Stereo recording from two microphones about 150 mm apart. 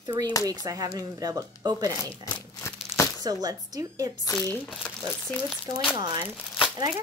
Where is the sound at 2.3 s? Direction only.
20° left (ahead or behind).